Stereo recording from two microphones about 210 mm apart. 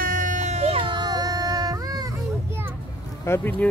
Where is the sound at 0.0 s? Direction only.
40° right (ahead or behind); by 2.7 s 15° right (ahead or behind).